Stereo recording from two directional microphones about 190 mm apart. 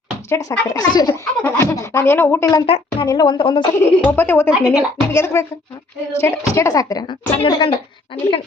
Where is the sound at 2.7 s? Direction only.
30° left (ahead or behind).